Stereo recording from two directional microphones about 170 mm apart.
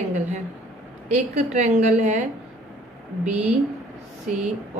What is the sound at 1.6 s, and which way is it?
A woman's voice, 45° right (ahead or behind).